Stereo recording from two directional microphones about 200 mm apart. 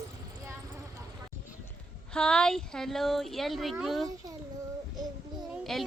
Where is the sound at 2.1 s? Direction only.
5° left (ahead or behind).